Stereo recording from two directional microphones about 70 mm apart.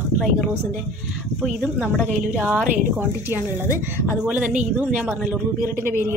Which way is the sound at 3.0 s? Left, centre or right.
Right.